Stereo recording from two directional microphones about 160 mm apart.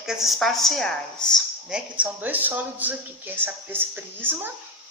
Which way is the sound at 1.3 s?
5° right (ahead or behind).